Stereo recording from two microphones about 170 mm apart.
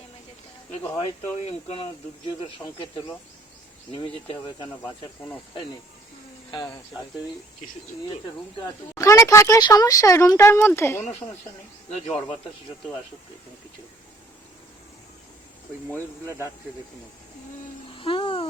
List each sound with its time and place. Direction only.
0.9 s speech: 35° left (ahead or behind)
4.8 s speech: 10° left (ahead or behind)
8.6 s speech: 20° left (ahead or behind)
17.9 s babbling: 30° left (ahead or behind)